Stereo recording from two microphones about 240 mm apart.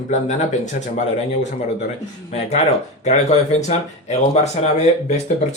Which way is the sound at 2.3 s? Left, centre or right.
Left.